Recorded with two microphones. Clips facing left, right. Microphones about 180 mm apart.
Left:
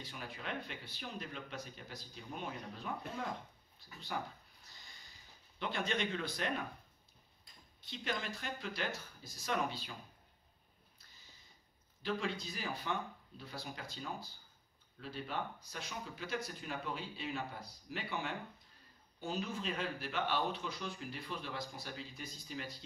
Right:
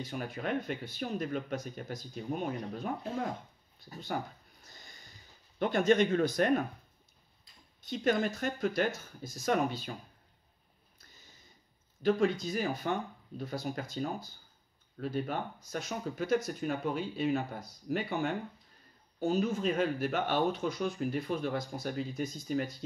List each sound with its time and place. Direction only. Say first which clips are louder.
0.0 s speech: right 10 dB; 45° right (ahead or behind)
3.9 s speech: right 6 dB; 40° right (ahead or behind)
5.6 s speech: right 12 dB; 45° right (ahead or behind)
7.9 s speech: right 11 dB; 45° right (ahead or behind)
12.0 s speech: right 11 dB; 45° right (ahead or behind)